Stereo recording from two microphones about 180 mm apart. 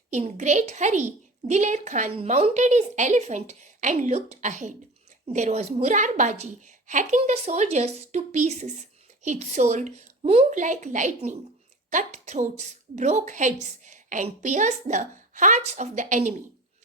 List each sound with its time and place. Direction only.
0.1 s a woman's voice: 40° right (ahead or behind)